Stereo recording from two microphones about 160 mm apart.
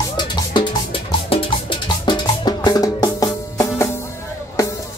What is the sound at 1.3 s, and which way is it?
Music, 30° left (ahead or behind).